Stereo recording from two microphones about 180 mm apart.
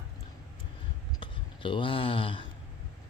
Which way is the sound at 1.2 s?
30° left (ahead or behind).